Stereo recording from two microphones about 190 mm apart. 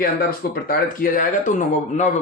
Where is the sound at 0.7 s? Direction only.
45° left (ahead or behind).